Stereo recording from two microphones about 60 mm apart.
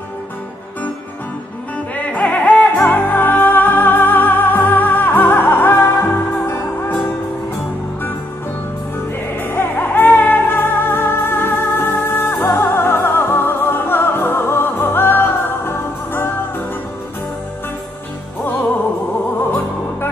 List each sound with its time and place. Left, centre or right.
2.0 s music: left
9.4 s music: left